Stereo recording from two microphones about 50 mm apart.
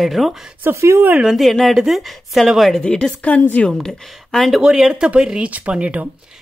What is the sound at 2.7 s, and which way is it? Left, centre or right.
Speech, centre.